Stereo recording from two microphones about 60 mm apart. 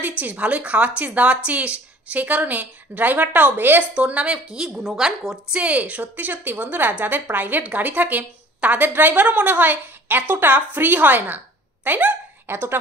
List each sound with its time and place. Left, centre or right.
0.2 s a woman's voice: right
3.9 s a woman's voice: centre
5.5 s a woman's voice: right
12.4 s a woman's voice: right